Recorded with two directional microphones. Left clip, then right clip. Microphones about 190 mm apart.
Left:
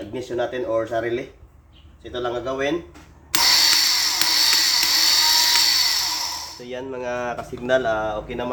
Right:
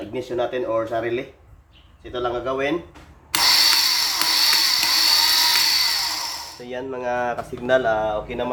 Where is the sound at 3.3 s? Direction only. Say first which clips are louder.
Even; centre (ahead or behind).